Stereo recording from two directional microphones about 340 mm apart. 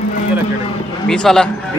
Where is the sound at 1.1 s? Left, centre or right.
Centre.